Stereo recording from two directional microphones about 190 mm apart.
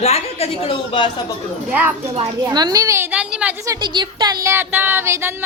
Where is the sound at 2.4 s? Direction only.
20° right (ahead or behind); by 3.5 s 5° right (ahead or behind).